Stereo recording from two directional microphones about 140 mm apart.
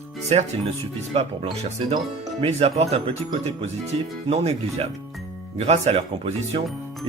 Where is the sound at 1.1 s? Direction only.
40° right (ahead or behind).